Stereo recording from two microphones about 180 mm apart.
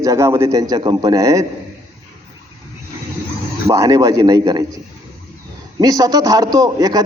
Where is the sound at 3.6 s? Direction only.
20° right (ahead or behind).